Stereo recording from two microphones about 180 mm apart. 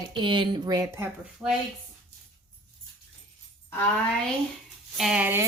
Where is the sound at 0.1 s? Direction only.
25° right (ahead or behind).